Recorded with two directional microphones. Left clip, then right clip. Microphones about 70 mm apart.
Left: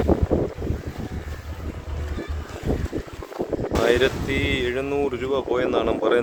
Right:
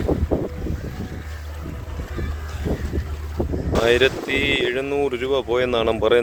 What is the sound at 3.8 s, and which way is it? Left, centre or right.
Speech, centre.